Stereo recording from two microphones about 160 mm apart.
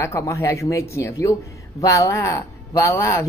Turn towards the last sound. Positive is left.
turn(degrees=20)  # may be behind; listen again after turning